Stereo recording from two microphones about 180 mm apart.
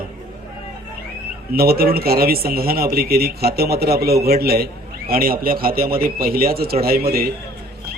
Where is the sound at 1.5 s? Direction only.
55° right (ahead or behind).